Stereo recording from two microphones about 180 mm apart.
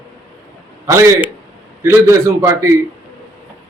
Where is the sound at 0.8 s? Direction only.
15° right (ahead or behind).